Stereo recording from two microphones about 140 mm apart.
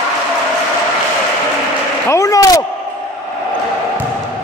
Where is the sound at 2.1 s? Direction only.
25° left (ahead or behind).